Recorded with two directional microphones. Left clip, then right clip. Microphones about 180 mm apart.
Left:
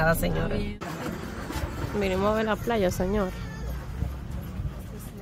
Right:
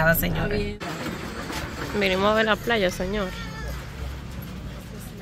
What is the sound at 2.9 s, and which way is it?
Speech, 25° left (ahead or behind).